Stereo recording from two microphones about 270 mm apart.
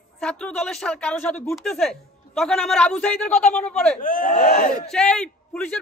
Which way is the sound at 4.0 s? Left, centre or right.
Left.